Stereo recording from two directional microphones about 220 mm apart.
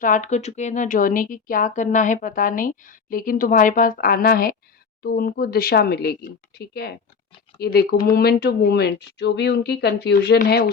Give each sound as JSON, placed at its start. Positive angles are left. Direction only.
{"t": 0.0, "sound": "speech", "side_deg": 35}